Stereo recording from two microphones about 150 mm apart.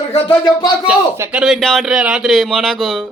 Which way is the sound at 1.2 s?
10° right (ahead or behind).